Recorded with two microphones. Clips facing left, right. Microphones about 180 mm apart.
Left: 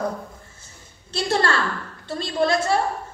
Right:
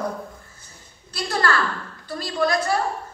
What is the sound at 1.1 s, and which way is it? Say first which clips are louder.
A woman's voice: left 2 dB; 25° left (ahead or behind).